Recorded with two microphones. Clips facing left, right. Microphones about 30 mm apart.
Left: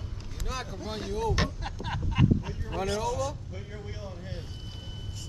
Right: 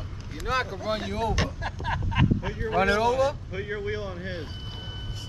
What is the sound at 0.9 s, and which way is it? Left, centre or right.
Speech, right.